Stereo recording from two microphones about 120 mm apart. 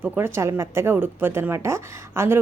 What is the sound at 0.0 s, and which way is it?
A woman's voice, 20° right (ahead or behind).